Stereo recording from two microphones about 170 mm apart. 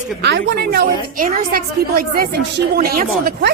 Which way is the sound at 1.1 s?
55° right (ahead or behind).